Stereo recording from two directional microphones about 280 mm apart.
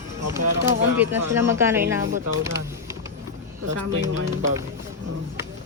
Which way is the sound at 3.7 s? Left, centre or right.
Right.